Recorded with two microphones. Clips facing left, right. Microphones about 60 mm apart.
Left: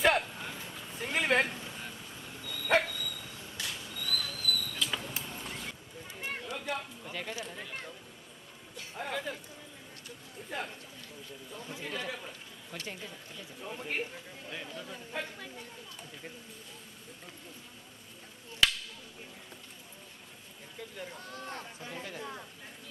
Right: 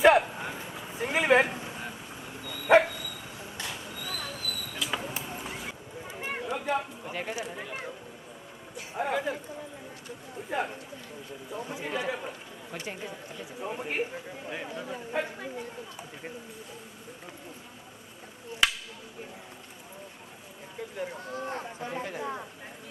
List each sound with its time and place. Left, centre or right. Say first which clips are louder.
0.0 s a sound: right 7 dB; centre
8.7 s music: right 7 dB; centre
10.5 s a sound: right 7 dB; centre
11.5 s chatter: right 6 dB; right
12.7 s speech: right 5 dB; right
20.7 s chatter: right 7 dB; right